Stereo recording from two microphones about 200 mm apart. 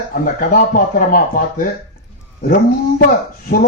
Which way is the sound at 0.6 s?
45° left (ahead or behind).